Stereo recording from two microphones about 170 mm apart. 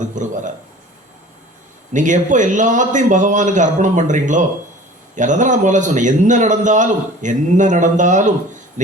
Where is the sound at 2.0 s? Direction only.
45° right (ahead or behind).